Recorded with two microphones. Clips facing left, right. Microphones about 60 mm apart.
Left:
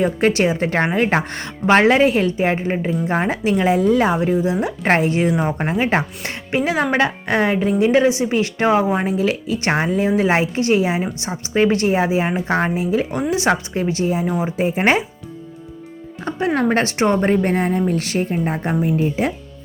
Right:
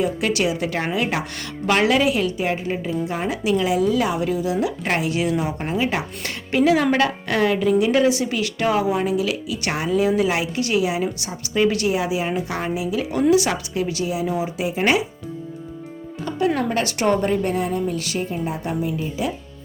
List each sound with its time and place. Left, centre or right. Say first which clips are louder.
0.0 s a woman's voice: left 4 dB; left
6.2 s a woman's voice: right 2 dB; left
16.2 s a woman's voice: left 2 dB; left
18.9 s speech: left 6 dB; left